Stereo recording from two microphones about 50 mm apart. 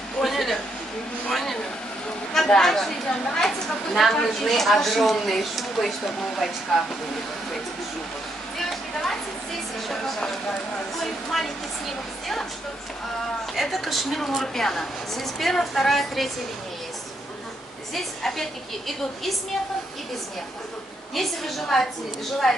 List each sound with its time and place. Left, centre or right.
0.2 s a man's voice: centre
1.3 s a sound: centre
2.3 s a woman's voice: centre
8.5 s a sound: centre
9.8 s a woman's voice: centre
11.2 s a woman's voice: centre
13.6 s a woman's voice: centre
17.9 s a woman's voice: centre
21.1 s a woman's voice: centre